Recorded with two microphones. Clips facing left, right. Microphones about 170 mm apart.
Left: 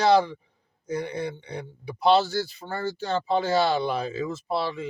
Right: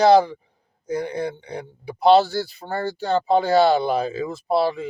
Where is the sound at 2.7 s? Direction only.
35° right (ahead or behind).